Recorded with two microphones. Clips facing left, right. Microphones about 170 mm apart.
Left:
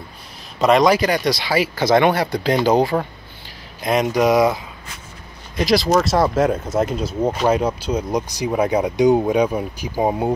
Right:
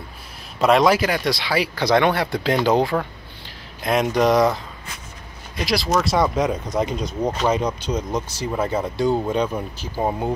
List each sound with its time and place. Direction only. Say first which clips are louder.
0.6 s speech: left 2 dB; centre (ahead or behind)
2.9 s speech: left 2 dB; 20° left (ahead or behind)
3.8 s speech: left 1 dB; centre (ahead or behind)
6.0 s speech: left 3 dB; centre (ahead or behind)